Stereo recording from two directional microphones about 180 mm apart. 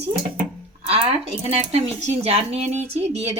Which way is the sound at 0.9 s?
35° right (ahead or behind).